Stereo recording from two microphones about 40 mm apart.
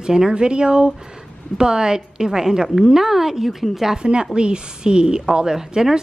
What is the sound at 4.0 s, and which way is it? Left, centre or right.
A woman's voice, right.